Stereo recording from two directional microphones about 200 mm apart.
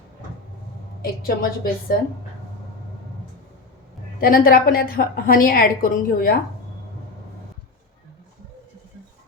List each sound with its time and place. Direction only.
1.4 s a woman's voice: 45° left (ahead or behind)
4.2 s a woman's voice: 45° left (ahead or behind)